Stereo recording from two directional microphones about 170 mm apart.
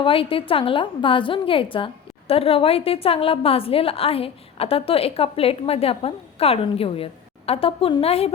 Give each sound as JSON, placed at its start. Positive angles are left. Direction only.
{"t": 0.0, "sound": "a woman's voice", "side_deg": 30}